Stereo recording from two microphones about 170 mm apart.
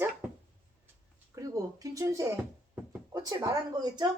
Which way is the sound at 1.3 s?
20° right (ahead or behind).